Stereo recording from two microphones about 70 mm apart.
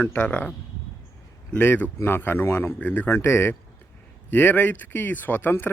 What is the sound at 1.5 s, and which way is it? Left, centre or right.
A man's voice, left.